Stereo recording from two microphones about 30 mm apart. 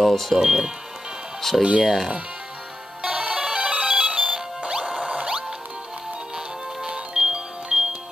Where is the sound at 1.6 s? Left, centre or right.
Right.